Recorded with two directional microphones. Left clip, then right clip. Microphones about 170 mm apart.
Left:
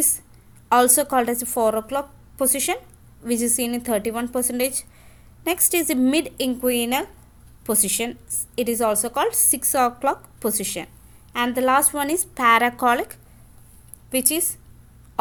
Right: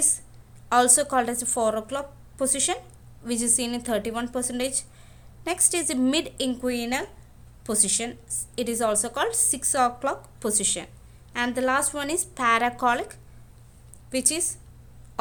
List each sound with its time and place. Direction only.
0.7 s a woman's voice: 15° left (ahead or behind)